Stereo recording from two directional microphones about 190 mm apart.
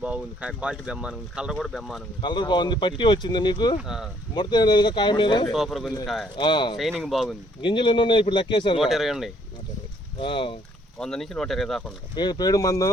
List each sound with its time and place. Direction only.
0.0 s speech: 5° right (ahead or behind)
2.2 s speech: 25° left (ahead or behind)
3.8 s speech: centre (ahead or behind)
4.4 s speech: 25° left (ahead or behind)
5.5 s speech: centre (ahead or behind)
6.3 s speech: 25° left (ahead or behind)
7.0 s speech: centre (ahead or behind)
7.6 s speech: 25° left (ahead or behind)
8.8 s speech: centre (ahead or behind)
10.2 s speech: 25° left (ahead or behind)
10.9 s speech: 5° left (ahead or behind)
12.1 s speech: 20° left (ahead or behind)